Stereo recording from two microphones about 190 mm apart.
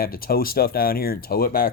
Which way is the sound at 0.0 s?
50° left (ahead or behind).